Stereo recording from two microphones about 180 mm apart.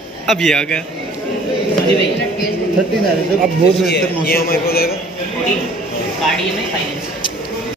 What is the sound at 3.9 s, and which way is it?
A man's voice, 60° left (ahead or behind).